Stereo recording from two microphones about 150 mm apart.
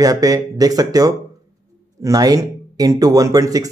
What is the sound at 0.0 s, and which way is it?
Speech, 25° right (ahead or behind).